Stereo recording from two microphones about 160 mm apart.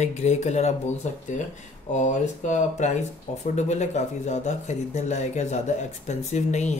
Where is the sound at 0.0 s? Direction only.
45° left (ahead or behind).